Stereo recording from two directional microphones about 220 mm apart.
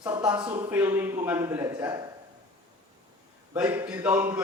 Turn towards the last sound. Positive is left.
turn(degrees=-10)  # may be behind; listen again after turning